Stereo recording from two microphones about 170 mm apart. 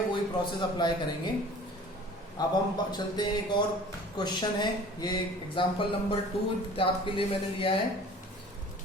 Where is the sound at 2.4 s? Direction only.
25° left (ahead or behind).